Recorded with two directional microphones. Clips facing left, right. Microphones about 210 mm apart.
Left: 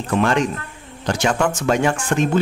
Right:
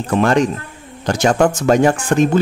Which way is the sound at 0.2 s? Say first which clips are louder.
Right 5 dB; 40° right (ahead or behind).